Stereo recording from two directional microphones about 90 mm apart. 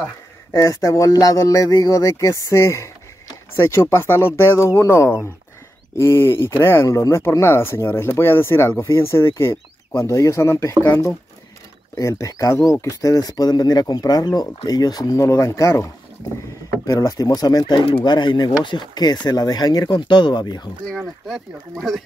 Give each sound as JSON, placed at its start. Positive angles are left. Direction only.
{"t": 0.5, "sound": "speech", "side_deg": 35}
{"t": 12.0, "sound": "speech", "side_deg": 35}
{"t": 21.7, "sound": "speech", "side_deg": 0}